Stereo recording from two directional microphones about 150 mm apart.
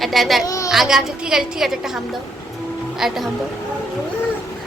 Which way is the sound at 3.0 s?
Centre (ahead or behind).